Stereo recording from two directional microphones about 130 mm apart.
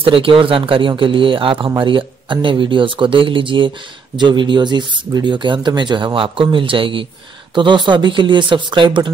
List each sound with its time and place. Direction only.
0.0 s speech: 40° right (ahead or behind)